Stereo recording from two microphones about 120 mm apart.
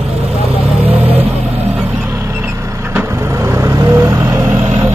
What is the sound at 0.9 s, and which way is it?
Vehicle, 15° right (ahead or behind).